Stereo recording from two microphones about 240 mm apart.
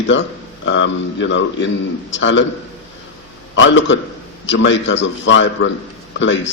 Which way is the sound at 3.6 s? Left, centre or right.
Left.